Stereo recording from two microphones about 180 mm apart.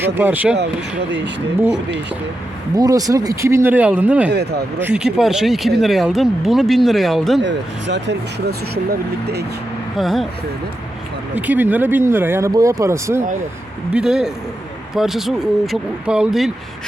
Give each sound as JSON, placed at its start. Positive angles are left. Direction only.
{"t": 0.0, "sound": "speech", "side_deg": -10}
{"t": 2.7, "sound": "speech", "side_deg": -20}
{"t": 4.3, "sound": "speech", "side_deg": -65}
{"t": 4.8, "sound": "speech", "side_deg": -10}
{"t": 7.4, "sound": "speech", "side_deg": -80}
{"t": 10.0, "sound": "speech", "side_deg": 0}
{"t": 11.3, "sound": "speech", "side_deg": -10}
{"t": 13.9, "sound": "speech", "side_deg": -5}